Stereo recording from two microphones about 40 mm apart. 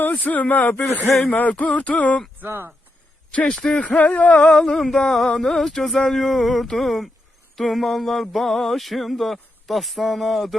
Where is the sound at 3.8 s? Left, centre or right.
Left.